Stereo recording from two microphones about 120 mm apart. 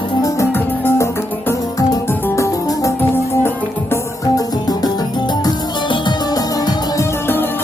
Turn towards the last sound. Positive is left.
turn(degrees=30)  # may be behind; listen again after turning